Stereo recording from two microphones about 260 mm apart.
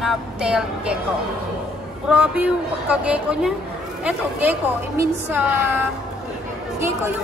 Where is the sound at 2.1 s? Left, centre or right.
Centre.